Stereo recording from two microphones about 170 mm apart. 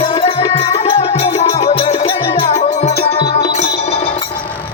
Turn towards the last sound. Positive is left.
turn(degrees=35)  # may be behind; listen again after turning